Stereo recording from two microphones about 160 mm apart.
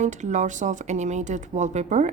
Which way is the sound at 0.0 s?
50° right (ahead or behind).